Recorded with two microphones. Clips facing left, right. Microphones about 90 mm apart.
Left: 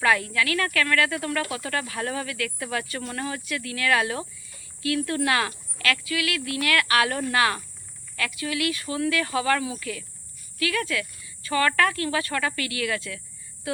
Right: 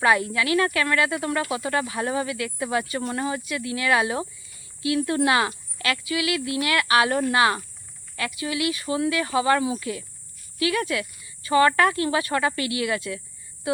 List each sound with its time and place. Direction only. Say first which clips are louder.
0.0 s speech: right 2 dB; 15° right (ahead or behind)